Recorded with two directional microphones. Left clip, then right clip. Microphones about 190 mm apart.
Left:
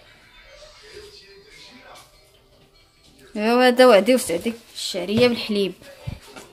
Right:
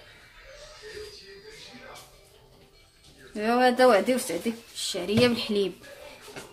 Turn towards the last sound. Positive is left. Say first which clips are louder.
# left 5 dB
turn(degrees=15)  # may be behind; listen again after turning